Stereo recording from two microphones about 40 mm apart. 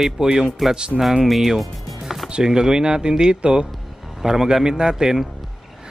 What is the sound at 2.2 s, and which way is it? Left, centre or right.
Speech, centre.